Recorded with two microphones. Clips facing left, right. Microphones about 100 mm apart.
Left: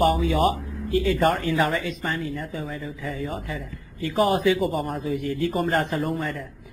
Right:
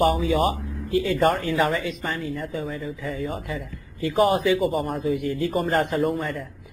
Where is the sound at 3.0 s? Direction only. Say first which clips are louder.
Even; 35° right (ahead or behind).